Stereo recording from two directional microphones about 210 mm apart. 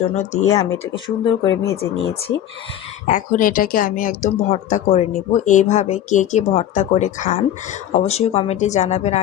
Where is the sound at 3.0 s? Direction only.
40° left (ahead or behind).